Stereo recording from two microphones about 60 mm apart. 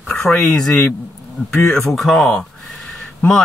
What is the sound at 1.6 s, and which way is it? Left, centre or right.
Speech, centre.